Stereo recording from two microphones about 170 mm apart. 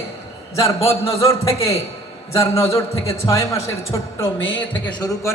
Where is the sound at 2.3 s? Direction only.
15° left (ahead or behind).